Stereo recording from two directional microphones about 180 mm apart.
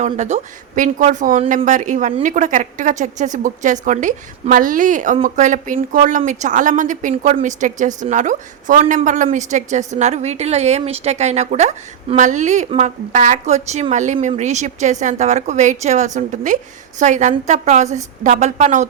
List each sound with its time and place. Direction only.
0.0 s a woman's voice: 40° right (ahead or behind)